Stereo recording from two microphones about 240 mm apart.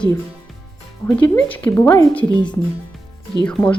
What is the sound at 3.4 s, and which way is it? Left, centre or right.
Speech, centre.